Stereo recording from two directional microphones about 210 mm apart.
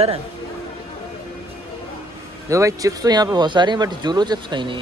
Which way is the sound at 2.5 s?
15° right (ahead or behind).